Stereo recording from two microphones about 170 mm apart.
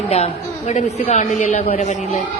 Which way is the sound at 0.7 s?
40° left (ahead or behind).